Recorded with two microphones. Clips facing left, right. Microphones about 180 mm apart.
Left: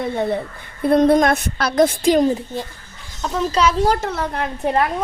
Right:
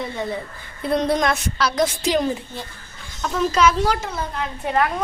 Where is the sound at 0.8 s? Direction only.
55° left (ahead or behind).